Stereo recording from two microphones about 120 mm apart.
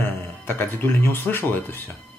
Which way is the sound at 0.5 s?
15° left (ahead or behind).